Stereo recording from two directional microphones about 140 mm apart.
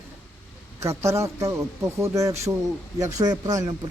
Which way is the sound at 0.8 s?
20° right (ahead or behind).